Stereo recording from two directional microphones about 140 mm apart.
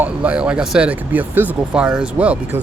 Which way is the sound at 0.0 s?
10° right (ahead or behind).